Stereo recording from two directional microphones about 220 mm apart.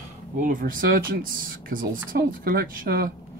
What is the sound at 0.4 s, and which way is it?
Speech, 40° right (ahead or behind).